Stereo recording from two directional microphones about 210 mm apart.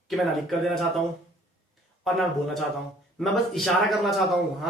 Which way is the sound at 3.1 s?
Centre (ahead or behind).